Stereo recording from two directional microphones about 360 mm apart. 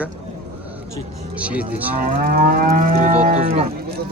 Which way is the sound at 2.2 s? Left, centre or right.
Right.